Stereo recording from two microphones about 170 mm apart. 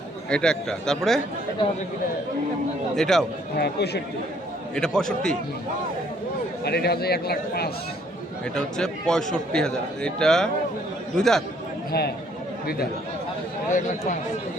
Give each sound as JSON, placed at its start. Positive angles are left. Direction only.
{"t": 0.3, "sound": "a man's voice", "side_deg": 5}
{"t": 2.9, "sound": "a man's voice", "side_deg": 5}
{"t": 3.6, "sound": "a man's voice", "side_deg": 75}
{"t": 4.7, "sound": "a man's voice", "side_deg": 5}
{"t": 6.7, "sound": "a man's voice", "side_deg": 70}
{"t": 8.5, "sound": "a man's voice", "side_deg": 5}
{"t": 11.9, "sound": "a man's voice", "side_deg": 65}
{"t": 13.7, "sound": "speech", "side_deg": 50}